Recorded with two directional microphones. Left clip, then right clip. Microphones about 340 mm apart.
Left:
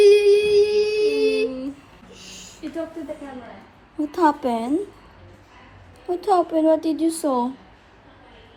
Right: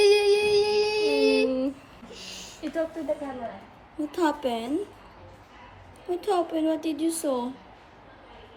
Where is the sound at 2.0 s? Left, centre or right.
Centre.